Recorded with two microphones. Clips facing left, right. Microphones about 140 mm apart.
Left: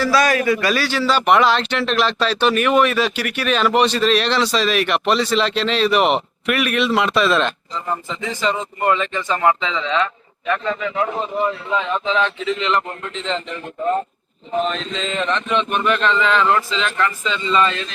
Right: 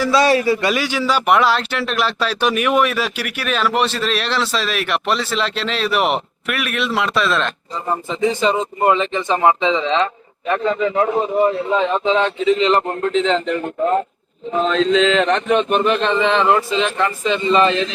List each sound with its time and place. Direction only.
0.0 s a man's voice: 25° right (ahead or behind); by 7.5 s centre (ahead or behind)
7.9 s speech: 20° right (ahead or behind); by 13.1 s 45° right (ahead or behind)
13.1 s mantra: 70° right (ahead or behind)
14.5 s mantra: 90° right; by 15.6 s 55° right (ahead or behind)
15.8 s speech: 25° right (ahead or behind)